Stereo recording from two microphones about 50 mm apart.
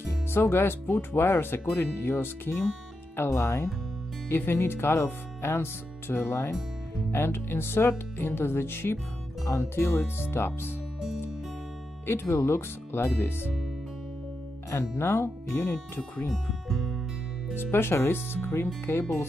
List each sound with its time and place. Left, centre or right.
0.3 s speech: left
4.3 s speech: left
9.5 s speech: left
12.1 s speech: left
14.7 s speech: left
16.3 s speech: centre
17.6 s speech: left